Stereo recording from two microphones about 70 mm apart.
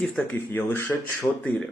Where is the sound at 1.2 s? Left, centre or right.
Left.